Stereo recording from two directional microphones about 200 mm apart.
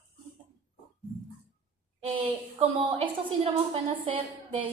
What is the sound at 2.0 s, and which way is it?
Speech, 30° right (ahead or behind).